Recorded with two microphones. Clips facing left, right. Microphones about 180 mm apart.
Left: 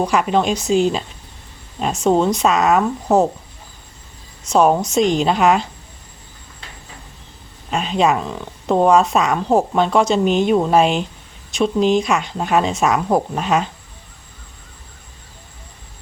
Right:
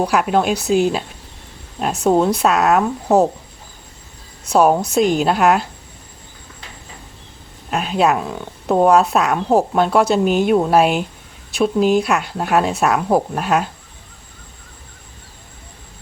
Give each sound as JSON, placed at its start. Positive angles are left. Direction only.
{"t": 0.0, "sound": "speech", "side_deg": -5}
{"t": 2.0, "sound": "speech", "side_deg": -5}
{"t": 4.5, "sound": "speech", "side_deg": -5}
{"t": 7.7, "sound": "speech", "side_deg": -5}